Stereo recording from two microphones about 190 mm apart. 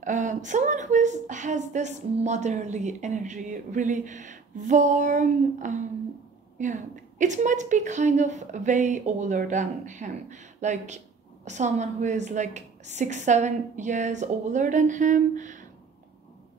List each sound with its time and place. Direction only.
0.0 s speech: 40° right (ahead or behind)